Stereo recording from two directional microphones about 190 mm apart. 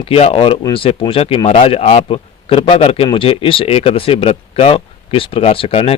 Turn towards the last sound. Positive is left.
turn(degrees=30)  # may be behind; listen again after turning